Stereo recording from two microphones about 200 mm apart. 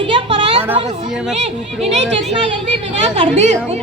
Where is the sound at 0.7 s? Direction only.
35° right (ahead or behind).